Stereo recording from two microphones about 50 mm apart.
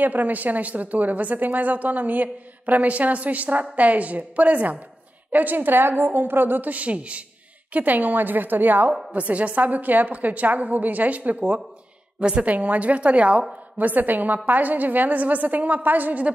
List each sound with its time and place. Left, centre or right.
0.0 s a woman's voice: right
12.2 s a woman's voice: centre
12.4 s a woman's voice: right